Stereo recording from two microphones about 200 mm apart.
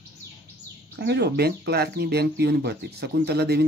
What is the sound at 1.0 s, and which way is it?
Speech, 55° right (ahead or behind).